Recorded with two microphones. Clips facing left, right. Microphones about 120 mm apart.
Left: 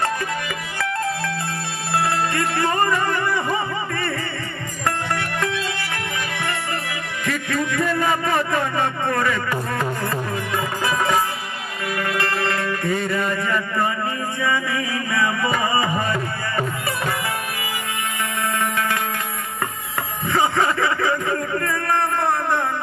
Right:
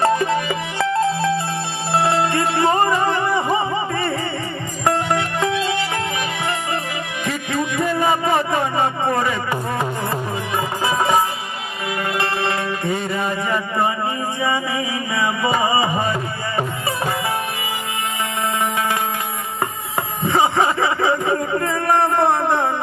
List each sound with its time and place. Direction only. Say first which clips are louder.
0.0 s music: right 7 dB; 20° right (ahead or behind)
7.3 s a sound: even; 20° right (ahead or behind)
10.8 s music: right 3 dB; 20° right (ahead or behind)
18.6 s music: right 2 dB; 20° right (ahead or behind)
20.2 s a man's voice: right 3 dB; 20° right (ahead or behind)